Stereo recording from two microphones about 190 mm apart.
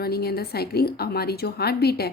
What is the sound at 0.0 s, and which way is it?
A woman's voice, 55° left (ahead or behind).